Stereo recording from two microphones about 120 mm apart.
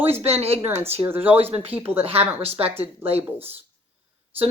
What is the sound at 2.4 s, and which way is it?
Speech, 55° right (ahead or behind).